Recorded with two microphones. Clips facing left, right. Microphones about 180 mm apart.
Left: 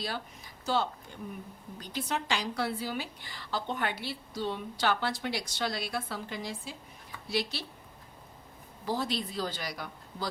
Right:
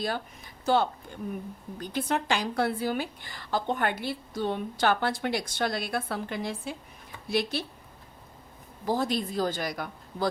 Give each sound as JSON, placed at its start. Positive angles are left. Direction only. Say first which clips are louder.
{"t": 0.6, "sound": "a woman's voice", "louder": "right 6 dB", "side_deg": -55}
{"t": 8.9, "sound": "a woman's voice", "louder": "right 5 dB", "side_deg": -50}